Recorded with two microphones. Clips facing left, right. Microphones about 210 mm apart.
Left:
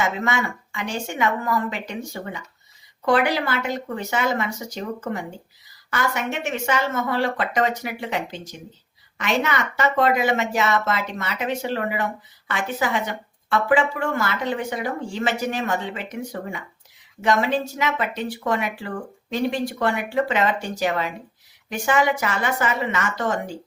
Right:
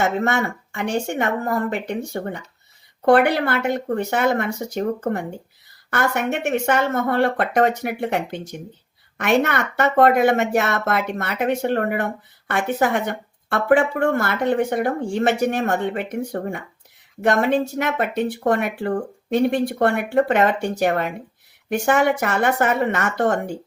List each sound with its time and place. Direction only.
0.0 s speech: 55° right (ahead or behind)